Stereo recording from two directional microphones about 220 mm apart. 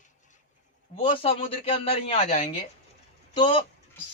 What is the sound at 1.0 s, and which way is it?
Mantra, 25° left (ahead or behind).